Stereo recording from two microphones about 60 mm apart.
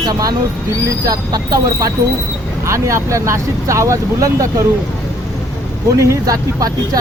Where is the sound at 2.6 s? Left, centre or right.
Right.